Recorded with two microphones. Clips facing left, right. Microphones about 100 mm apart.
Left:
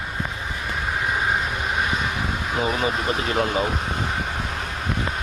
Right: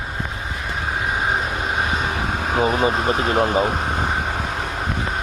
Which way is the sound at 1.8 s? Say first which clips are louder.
Right 2 dB; 25° right (ahead or behind).